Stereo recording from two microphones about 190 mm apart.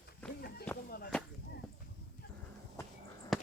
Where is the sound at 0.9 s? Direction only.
55° left (ahead or behind).